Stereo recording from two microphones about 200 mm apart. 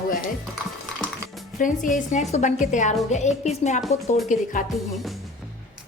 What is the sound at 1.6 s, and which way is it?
A woman's voice, 40° left (ahead or behind).